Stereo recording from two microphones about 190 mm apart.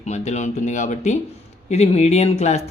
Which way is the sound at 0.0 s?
40° left (ahead or behind).